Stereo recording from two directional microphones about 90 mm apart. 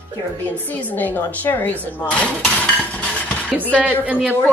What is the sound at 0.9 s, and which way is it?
A woman's voice, 20° left (ahead or behind).